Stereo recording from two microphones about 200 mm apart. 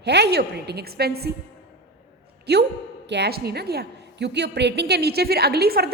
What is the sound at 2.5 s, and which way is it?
A woman's voice, 55° right (ahead or behind).